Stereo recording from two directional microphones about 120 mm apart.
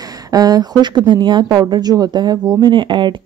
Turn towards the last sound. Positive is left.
turn(degrees=-40)  # may be behind; listen again after turning